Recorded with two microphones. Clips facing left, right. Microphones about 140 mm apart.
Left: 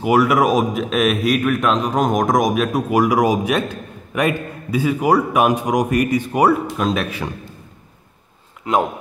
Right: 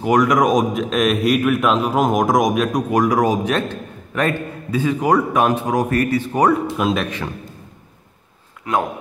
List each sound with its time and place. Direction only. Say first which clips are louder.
0.0 s a man's voice: even; 5° left (ahead or behind)
6.8 s a man's voice: right 1 dB; centre (ahead or behind)
8.6 s speech: left 2 dB; 25° left (ahead or behind)